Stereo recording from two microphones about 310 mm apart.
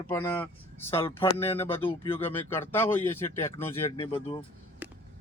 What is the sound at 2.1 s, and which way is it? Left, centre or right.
Speech, centre.